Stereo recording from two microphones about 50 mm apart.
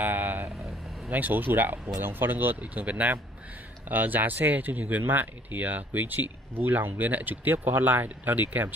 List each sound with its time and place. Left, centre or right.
0.0 s vehicle: right
1.1 s speech: right
2.6 s speech: right